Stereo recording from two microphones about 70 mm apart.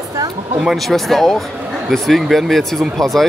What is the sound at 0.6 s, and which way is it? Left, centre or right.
Speech, centre.